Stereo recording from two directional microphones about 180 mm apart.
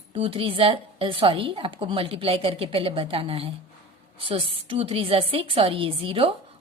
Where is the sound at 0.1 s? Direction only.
30° right (ahead or behind).